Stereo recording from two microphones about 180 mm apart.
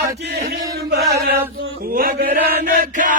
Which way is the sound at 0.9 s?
60° right (ahead or behind).